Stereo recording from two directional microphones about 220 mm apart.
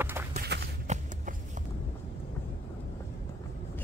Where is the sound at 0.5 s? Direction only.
50° right (ahead or behind).